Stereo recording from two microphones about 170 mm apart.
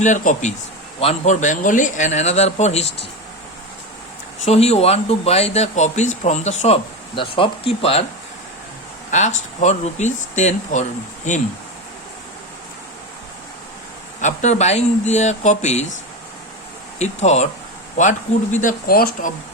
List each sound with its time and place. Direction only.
0.0 s a man's voice: 45° left (ahead or behind)
4.4 s speech: 40° left (ahead or behind)
7.2 s speech: 30° left (ahead or behind)
9.0 s a man's voice: 45° left (ahead or behind)
14.2 s speech: 45° left (ahead or behind)
17.0 s a man's voice: 40° left (ahead or behind)
18.6 s speech: 55° left (ahead or behind)